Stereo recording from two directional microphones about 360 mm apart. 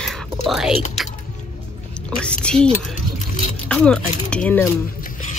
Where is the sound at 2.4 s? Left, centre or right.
Centre.